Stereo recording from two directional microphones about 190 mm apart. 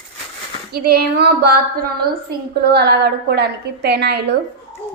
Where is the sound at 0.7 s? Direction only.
55° right (ahead or behind).